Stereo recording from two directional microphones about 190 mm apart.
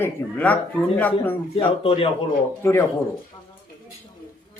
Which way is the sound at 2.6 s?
10° left (ahead or behind).